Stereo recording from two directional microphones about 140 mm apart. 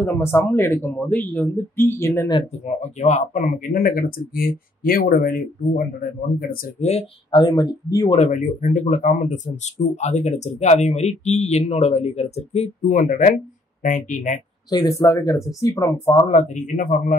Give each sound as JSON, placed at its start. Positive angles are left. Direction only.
{"t": 0.0, "sound": "speech", "side_deg": 20}
{"t": 2.6, "sound": "speech", "side_deg": 55}
{"t": 6.8, "sound": "speech", "side_deg": 45}
{"t": 7.3, "sound": "speech", "side_deg": 30}
{"t": 8.1, "sound": "speech", "side_deg": 55}
{"t": 14.7, "sound": "speech", "side_deg": 25}
{"t": 16.3, "sound": "speech", "side_deg": 55}